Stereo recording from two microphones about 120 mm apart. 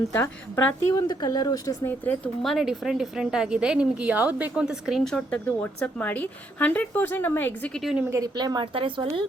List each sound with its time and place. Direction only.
0.1 s a woman's voice: 20° left (ahead or behind)
1.0 s speech: 35° left (ahead or behind)
1.9 s a woman's voice: 10° left (ahead or behind)
7.7 s a woman's voice: centre (ahead or behind)
8.1 s speech: 30° right (ahead or behind)